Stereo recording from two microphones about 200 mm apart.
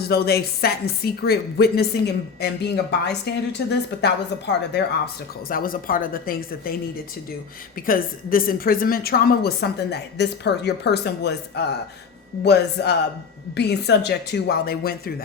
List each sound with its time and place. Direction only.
0.1 s a woman's voice: 50° left (ahead or behind)
5.5 s a woman's voice: 45° left (ahead or behind)
7.9 s a woman's voice: 45° left (ahead or behind)